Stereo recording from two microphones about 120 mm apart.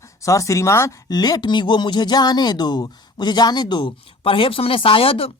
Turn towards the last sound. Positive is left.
turn(degrees=50)  # may be behind; listen again after turning